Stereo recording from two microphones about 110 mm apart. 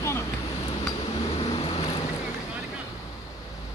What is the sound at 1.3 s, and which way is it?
Vehicle, 65° left (ahead or behind).